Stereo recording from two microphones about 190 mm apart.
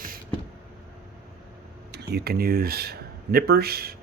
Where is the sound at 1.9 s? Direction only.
60° right (ahead or behind).